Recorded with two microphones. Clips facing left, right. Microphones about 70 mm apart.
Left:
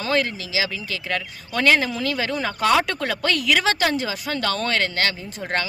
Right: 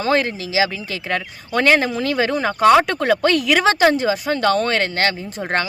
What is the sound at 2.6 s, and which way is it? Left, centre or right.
Speech, right.